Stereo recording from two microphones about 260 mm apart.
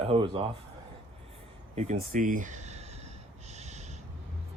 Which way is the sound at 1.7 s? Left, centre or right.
Right.